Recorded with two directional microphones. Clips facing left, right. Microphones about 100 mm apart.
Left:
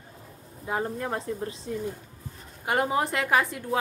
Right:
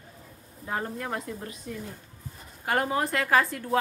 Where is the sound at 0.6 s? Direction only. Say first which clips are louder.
Left 3 dB; 15° left (ahead or behind).